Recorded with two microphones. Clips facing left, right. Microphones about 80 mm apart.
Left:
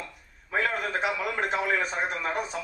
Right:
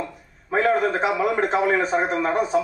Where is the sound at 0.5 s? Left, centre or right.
Right.